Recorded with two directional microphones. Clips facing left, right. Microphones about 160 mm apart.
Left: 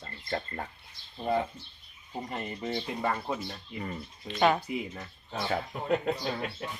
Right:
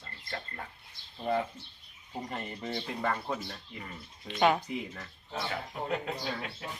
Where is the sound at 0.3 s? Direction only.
30° left (ahead or behind).